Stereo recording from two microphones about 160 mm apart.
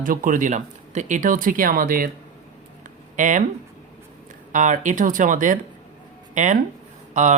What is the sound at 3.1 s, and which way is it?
Speech, 55° right (ahead or behind).